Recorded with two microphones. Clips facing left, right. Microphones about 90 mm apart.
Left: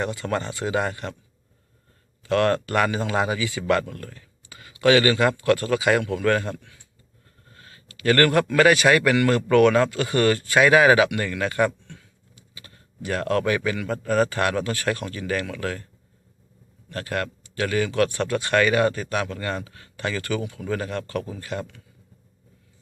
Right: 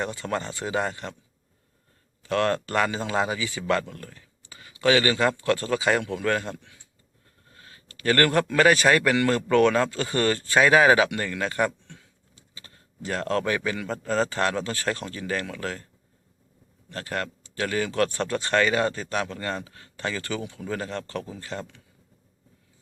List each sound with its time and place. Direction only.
0.2 s speech: 20° right (ahead or behind)
2.2 s speech: 20° right (ahead or behind)
8.0 s a man's voice: 25° right (ahead or behind)
16.9 s speech: 25° right (ahead or behind)